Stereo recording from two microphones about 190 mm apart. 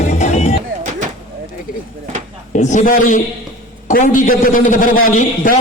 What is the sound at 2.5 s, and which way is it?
A man's voice, 40° left (ahead or behind).